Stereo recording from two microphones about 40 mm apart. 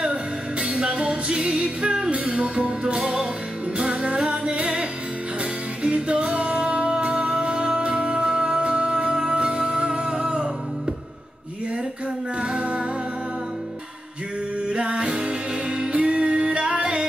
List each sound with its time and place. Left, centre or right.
0.0 s music: right
12.4 s music: right
14.7 s music: right